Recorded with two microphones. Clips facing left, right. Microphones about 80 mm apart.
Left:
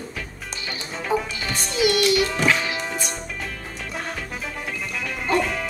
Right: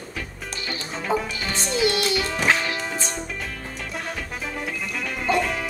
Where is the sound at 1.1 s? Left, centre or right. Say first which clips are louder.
Even; right.